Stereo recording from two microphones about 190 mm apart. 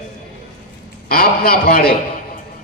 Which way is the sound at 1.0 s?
50° left (ahead or behind).